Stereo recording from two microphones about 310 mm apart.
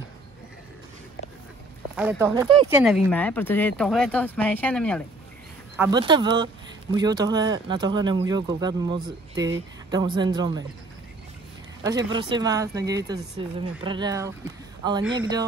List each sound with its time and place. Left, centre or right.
2.0 s speech: centre
2.7 s speech: centre
5.8 s speech: centre
12.1 s speech: centre